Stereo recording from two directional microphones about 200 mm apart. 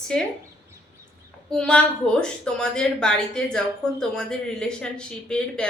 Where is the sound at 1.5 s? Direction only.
5° left (ahead or behind).